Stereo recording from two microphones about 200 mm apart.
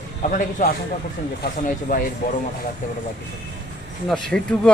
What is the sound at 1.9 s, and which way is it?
Speech, 45° left (ahead or behind).